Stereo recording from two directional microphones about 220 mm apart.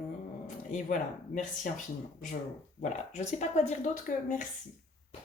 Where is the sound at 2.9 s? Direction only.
30° left (ahead or behind).